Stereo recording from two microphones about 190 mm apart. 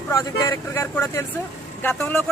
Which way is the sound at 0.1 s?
15° left (ahead or behind).